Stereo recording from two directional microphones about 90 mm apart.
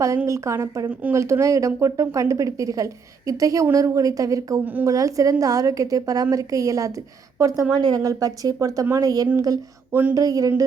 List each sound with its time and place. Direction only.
0.3 s speech: 35° right (ahead or behind)
4.6 s a woman's voice: 20° right (ahead or behind)
4.9 s speech: 40° right (ahead or behind)
9.9 s a woman's voice: 20° right (ahead or behind)
10.2 s speech: 40° right (ahead or behind)